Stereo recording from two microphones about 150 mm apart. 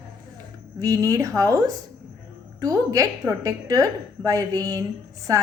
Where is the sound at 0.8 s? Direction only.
25° right (ahead or behind).